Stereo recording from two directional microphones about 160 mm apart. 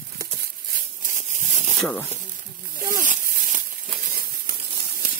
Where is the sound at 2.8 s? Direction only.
55° right (ahead or behind).